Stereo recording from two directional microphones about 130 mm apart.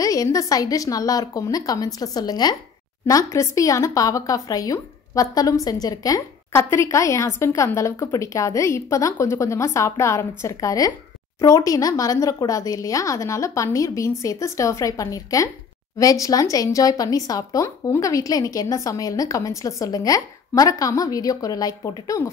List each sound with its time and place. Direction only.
0.0 s speech: 25° left (ahead or behind)